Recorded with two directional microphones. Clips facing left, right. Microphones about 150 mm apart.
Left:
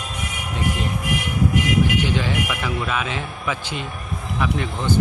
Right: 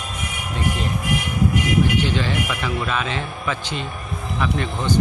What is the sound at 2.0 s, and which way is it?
A man's voice, 10° left (ahead or behind).